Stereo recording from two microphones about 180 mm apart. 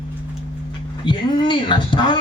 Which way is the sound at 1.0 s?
25° left (ahead or behind).